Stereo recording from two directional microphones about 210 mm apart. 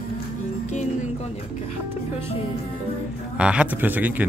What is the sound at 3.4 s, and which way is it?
Speech, 5° right (ahead or behind).